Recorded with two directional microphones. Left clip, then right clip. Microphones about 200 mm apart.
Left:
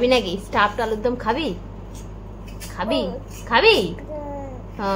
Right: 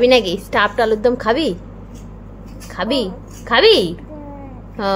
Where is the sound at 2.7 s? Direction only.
30° right (ahead or behind).